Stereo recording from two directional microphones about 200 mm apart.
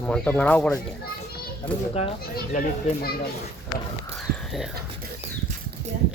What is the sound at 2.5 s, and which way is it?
Speech, 35° left (ahead or behind).